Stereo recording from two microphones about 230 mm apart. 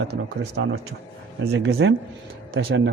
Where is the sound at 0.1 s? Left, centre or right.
Right.